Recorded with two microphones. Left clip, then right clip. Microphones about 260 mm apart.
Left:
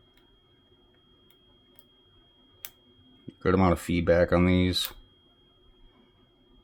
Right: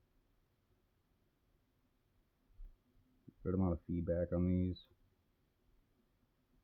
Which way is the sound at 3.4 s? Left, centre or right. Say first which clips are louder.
Left 16 dB; centre.